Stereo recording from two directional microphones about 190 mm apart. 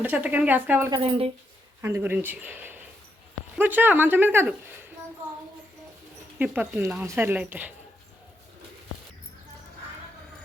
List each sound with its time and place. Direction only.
0.0 s speech: 10° right (ahead or behind)
0.9 s speech: 25° right (ahead or behind)
1.8 s speech: 15° right (ahead or behind)
6.4 s speech: 10° right (ahead or behind)